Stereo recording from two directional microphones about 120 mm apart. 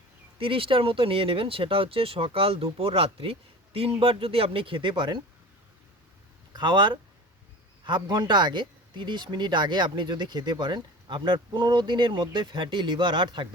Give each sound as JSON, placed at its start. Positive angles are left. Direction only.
{"t": 0.3, "sound": "speech", "side_deg": -50}
{"t": 6.5, "sound": "speech", "side_deg": -40}